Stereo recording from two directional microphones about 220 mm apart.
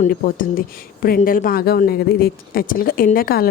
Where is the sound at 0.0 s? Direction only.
40° left (ahead or behind).